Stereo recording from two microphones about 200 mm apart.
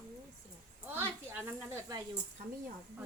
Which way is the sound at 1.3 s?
10° right (ahead or behind).